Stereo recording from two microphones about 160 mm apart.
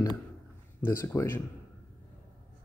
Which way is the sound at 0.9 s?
15° left (ahead or behind).